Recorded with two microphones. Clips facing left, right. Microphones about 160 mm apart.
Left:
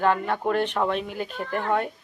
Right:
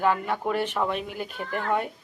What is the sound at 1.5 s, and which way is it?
Speech, 35° left (ahead or behind).